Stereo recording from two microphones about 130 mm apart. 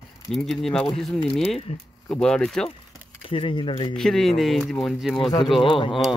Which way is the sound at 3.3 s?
40° left (ahead or behind).